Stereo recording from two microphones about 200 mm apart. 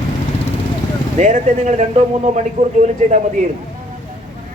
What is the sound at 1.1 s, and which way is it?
A man's voice, 40° right (ahead or behind).